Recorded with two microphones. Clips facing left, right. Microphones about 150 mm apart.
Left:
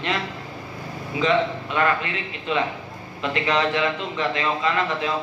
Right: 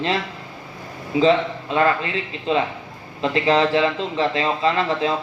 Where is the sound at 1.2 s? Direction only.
30° right (ahead or behind).